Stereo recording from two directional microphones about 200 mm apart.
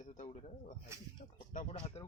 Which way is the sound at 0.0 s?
40° left (ahead or behind).